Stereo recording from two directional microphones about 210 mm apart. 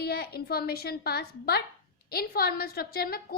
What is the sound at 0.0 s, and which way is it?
A woman's voice, 50° left (ahead or behind).